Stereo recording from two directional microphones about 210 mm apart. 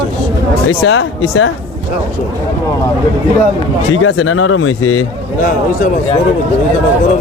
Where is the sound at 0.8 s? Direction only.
65° left (ahead or behind).